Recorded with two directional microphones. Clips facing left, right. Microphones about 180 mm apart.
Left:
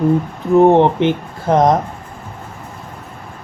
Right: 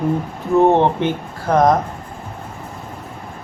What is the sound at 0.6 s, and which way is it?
Speech, 15° left (ahead or behind).